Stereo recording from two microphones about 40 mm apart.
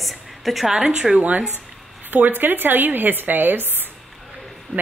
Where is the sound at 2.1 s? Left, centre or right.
Right.